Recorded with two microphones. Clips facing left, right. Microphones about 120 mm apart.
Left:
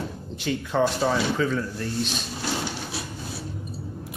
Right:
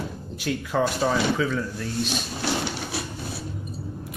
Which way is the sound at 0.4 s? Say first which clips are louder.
Left 1 dB; 5° right (ahead or behind).